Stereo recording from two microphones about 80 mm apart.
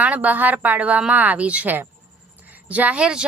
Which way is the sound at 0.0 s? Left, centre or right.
Centre.